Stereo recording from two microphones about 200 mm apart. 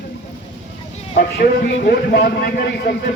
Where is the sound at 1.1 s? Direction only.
45° left (ahead or behind).